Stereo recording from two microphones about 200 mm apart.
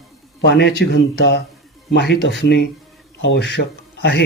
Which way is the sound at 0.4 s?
60° left (ahead or behind).